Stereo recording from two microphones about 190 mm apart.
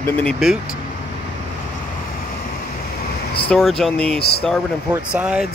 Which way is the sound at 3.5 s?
Centre (ahead or behind).